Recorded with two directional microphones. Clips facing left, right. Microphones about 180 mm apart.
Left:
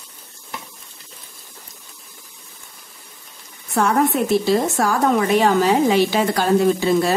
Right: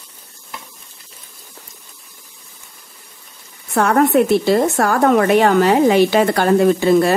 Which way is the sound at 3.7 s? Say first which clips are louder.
Right 4 dB; 65° right (ahead or behind).